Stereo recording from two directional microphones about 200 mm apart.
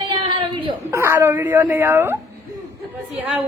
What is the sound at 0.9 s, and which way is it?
A woman's voice, 15° right (ahead or behind).